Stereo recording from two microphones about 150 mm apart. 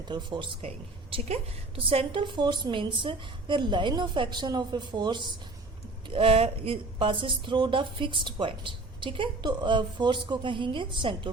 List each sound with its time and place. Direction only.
0.1 s speech: 30° right (ahead or behind)
1.8 s speech: 40° right (ahead or behind)